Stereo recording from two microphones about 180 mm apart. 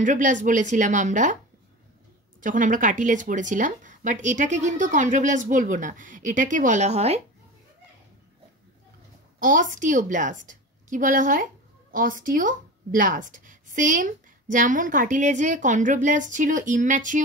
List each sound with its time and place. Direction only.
0.0 s a woman's voice: 45° right (ahead or behind)
2.4 s a woman's voice: 45° right (ahead or behind)
9.4 s a woman's voice: 50° right (ahead or behind)